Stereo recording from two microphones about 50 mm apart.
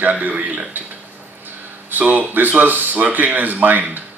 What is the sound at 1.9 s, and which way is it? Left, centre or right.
Speech, right.